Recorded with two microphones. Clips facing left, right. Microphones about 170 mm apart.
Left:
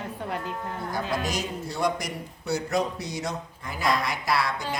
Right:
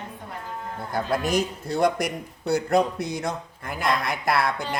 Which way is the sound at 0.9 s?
55° right (ahead or behind).